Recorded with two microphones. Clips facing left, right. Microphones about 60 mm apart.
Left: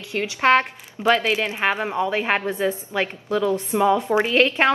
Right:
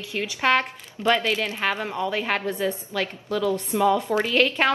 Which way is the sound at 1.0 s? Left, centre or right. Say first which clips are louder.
Left 3 dB; centre.